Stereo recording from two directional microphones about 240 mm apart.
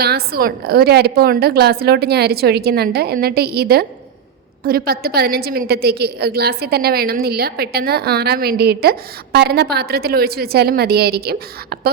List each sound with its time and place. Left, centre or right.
0.0 s a woman's voice: right